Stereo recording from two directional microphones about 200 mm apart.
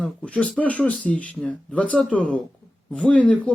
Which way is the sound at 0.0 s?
5° left (ahead or behind).